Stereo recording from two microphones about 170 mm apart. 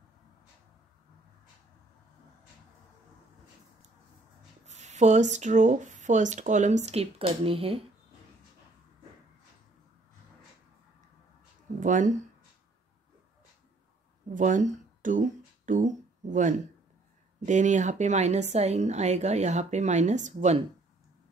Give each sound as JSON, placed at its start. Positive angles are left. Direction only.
{"t": 4.6, "sound": "a woman's voice", "side_deg": -45}
{"t": 11.8, "sound": "speech", "side_deg": -50}
{"t": 14.3, "sound": "a woman's voice", "side_deg": -50}